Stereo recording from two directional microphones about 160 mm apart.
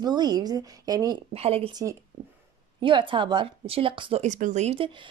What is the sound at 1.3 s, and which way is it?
Speech, 40° right (ahead or behind).